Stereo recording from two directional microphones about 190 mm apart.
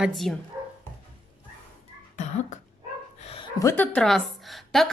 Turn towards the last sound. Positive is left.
turn(degrees=0)  # may be behind; listen again after turning